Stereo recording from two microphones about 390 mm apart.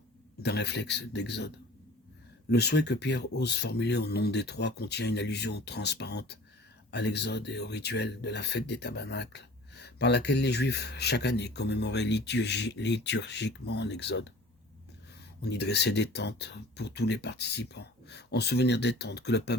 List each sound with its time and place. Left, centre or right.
0.4 s speech: left
15.4 s speech: left